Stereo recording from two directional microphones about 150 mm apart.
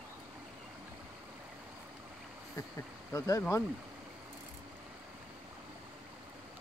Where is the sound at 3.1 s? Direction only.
20° left (ahead or behind).